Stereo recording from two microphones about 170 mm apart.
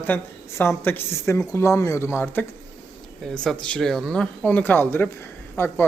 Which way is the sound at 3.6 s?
5° left (ahead or behind).